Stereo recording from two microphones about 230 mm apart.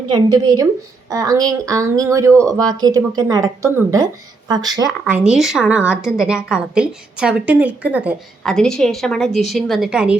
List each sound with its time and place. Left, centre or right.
0.1 s speech: centre
5.0 s a woman's voice: centre